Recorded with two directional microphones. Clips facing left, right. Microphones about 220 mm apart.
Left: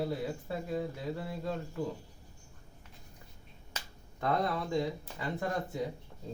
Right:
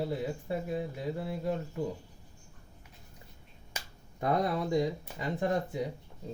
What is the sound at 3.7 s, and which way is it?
Speech, 15° right (ahead or behind).